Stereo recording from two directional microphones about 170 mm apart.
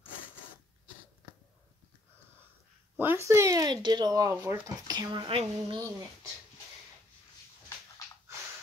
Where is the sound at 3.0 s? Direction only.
15° right (ahead or behind); by 5.8 s 30° right (ahead or behind).